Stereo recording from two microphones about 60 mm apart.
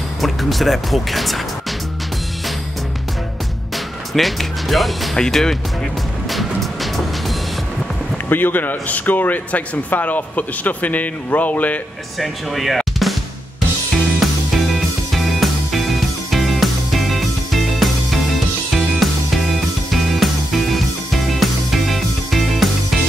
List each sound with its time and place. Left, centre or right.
0.2 s speech: centre
3.7 s speech: centre
6.3 s music: centre
8.3 s speech: left
12.2 s speech: centre
13.0 s drum: centre
15.1 s music: centre